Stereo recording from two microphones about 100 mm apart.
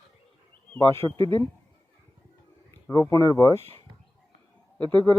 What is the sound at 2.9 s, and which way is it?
Speech, 30° left (ahead or behind).